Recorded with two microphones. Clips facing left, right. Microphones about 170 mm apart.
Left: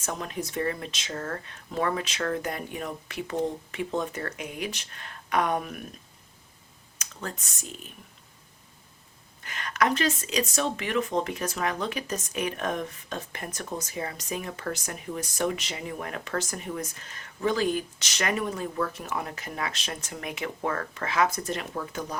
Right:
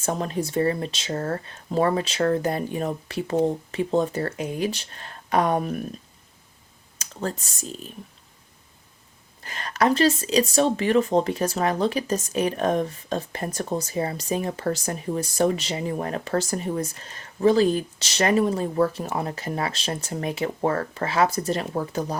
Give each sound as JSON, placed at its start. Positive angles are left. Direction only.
{"t": 0.0, "sound": "a woman's voice", "side_deg": -35}
{"t": 7.0, "sound": "a woman's voice", "side_deg": -35}
{"t": 9.4, "sound": "a woman's voice", "side_deg": -35}